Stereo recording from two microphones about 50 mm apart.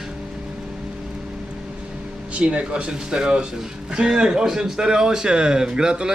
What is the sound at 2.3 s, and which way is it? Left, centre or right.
Speech, right.